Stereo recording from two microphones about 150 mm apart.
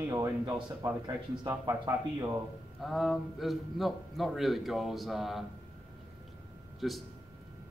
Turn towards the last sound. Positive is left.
turn(degrees=0)  # may be behind; listen again after turning